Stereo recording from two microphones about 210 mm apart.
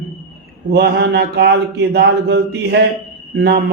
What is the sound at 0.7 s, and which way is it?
A man's voice, 50° right (ahead or behind).